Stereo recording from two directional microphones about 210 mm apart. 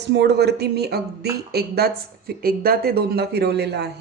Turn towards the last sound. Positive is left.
turn(degrees=-50)  # may be behind; listen again after turning